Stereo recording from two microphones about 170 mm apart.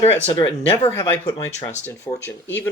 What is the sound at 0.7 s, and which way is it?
Speech, 15° left (ahead or behind).